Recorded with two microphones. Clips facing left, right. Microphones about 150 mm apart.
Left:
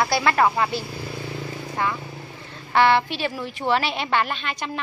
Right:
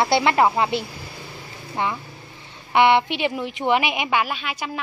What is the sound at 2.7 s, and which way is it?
Speech, 20° right (ahead or behind).